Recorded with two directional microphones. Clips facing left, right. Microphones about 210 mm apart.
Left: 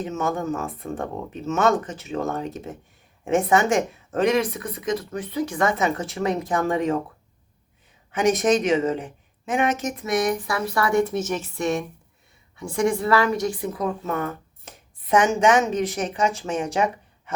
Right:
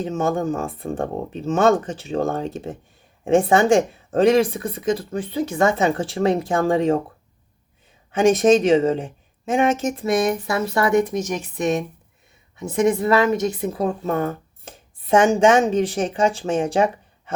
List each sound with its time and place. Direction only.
0.0 s a woman's voice: 30° right (ahead or behind)
8.1 s a woman's voice: 30° right (ahead or behind)